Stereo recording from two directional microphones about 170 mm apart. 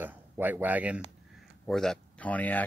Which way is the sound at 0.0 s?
10° right (ahead or behind).